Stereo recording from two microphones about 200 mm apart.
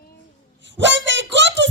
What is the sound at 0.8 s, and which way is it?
Speech, 65° right (ahead or behind).